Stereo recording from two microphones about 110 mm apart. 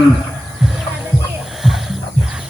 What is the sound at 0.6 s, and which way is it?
Music, 5° right (ahead or behind).